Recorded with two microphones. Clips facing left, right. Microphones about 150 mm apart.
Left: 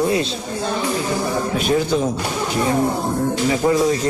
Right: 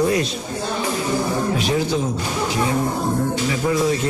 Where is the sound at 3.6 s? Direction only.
40° left (ahead or behind).